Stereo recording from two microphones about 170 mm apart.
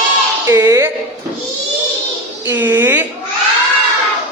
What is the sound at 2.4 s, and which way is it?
Speech, 10° right (ahead or behind).